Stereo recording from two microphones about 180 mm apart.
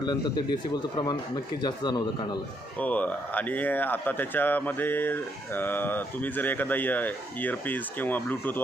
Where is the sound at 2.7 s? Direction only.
10° left (ahead or behind).